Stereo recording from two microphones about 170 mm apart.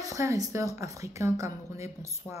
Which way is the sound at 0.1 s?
20° right (ahead or behind).